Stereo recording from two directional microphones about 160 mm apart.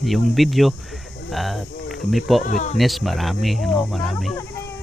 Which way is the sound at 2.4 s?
50° left (ahead or behind).